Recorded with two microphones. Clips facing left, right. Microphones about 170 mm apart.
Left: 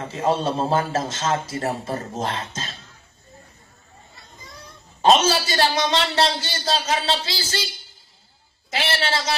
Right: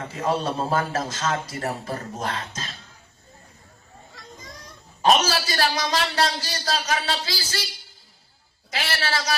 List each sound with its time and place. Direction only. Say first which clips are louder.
0.0 s a man's voice: left 3 dB; 25° left (ahead or behind)
5.0 s a man's voice: left 3 dB; 25° left (ahead or behind)
8.7 s a man's voice: left 3 dB; 25° left (ahead or behind)